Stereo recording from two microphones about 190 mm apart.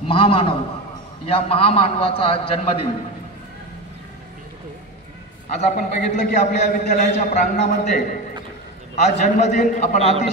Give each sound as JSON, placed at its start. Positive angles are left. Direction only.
{"t": 0.1, "sound": "a man's voice", "side_deg": 30}
{"t": 5.5, "sound": "a man's voice", "side_deg": 45}